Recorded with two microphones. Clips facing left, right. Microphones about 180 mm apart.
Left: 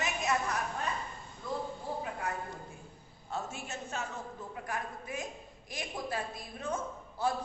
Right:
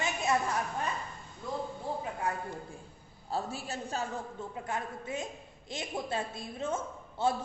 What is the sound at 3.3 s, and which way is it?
A man's voice, 35° right (ahead or behind).